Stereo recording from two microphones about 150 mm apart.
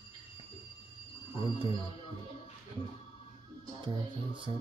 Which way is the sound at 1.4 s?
30° right (ahead or behind).